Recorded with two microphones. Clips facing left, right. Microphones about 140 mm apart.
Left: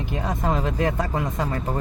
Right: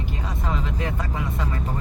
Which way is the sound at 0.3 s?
45° left (ahead or behind).